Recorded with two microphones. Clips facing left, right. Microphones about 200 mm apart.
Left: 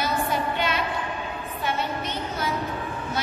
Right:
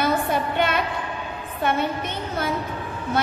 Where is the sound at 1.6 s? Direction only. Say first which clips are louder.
Right 6 dB; 55° right (ahead or behind).